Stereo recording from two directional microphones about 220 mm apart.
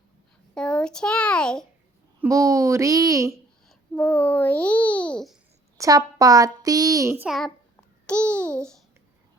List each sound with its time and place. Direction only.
0.5 s a child's voice: 5° left (ahead or behind)
2.2 s a child's voice: 15° right (ahead or behind)
3.9 s a child's voice: 5° left (ahead or behind)
5.7 s a child's voice: 15° right (ahead or behind); by 8.8 s 5° left (ahead or behind)